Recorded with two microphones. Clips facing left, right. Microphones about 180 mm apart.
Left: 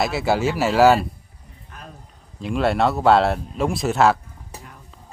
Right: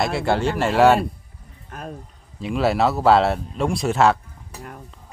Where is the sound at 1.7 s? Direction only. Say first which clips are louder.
Right 7 dB; 45° right (ahead or behind).